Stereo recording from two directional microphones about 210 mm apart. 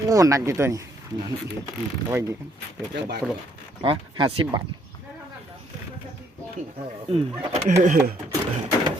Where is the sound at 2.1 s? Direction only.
10° right (ahead or behind).